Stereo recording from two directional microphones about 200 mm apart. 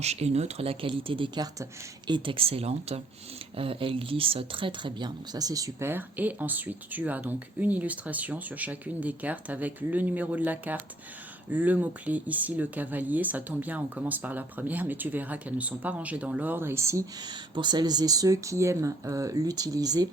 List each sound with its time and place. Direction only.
0.0 s speech: 30° right (ahead or behind)